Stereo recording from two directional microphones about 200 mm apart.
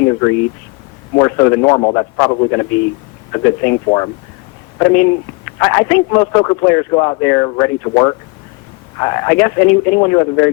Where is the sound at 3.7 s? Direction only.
25° left (ahead or behind).